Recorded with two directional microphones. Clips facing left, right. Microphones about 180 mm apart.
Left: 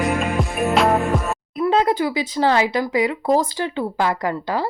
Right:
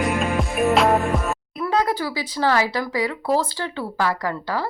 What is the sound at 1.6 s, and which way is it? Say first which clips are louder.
Speech: left 4 dB; 25° left (ahead or behind).